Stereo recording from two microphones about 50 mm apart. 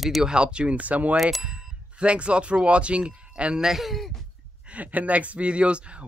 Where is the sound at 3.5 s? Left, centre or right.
Centre.